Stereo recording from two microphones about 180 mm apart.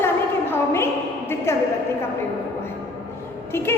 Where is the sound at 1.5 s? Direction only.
15° left (ahead or behind).